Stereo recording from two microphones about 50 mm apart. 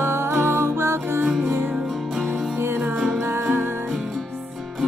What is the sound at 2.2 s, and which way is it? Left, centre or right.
Music, right.